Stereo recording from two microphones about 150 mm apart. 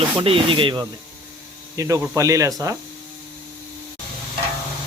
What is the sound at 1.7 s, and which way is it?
Speech, 20° right (ahead or behind).